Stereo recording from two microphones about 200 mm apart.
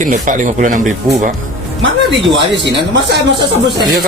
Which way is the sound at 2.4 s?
60° right (ahead or behind).